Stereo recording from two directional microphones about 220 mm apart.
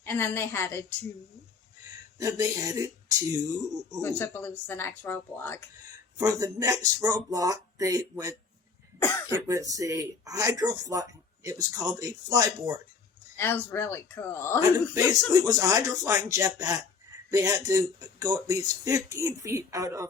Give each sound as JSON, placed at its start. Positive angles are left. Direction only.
{"t": 0.0, "sound": "speech", "side_deg": 10}
{"t": 2.1, "sound": "speech", "side_deg": -15}
{"t": 4.0, "sound": "speech", "side_deg": 10}
{"t": 6.1, "sound": "speech", "side_deg": -15}
{"t": 9.0, "sound": "speech", "side_deg": 10}
{"t": 9.3, "sound": "speech", "side_deg": -15}
{"t": 13.3, "sound": "speech", "side_deg": 10}
{"t": 14.9, "sound": "speech", "side_deg": -15}